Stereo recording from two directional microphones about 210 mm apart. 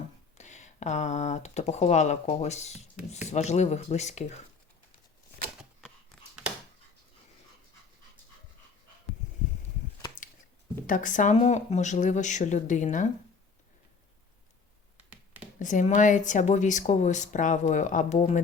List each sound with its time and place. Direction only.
0.3 s speech: 35° left (ahead or behind)
10.8 s speech: 40° left (ahead or behind)
15.1 s a sound: 10° right (ahead or behind)
15.5 s speech: 35° left (ahead or behind)